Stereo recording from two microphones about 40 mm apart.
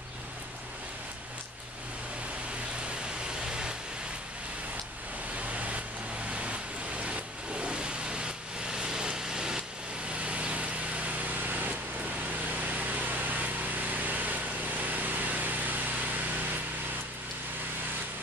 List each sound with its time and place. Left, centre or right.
3.4 s vehicle: right
6.3 s vehicle: right
10.2 s light engine: right
12.6 s a sound: right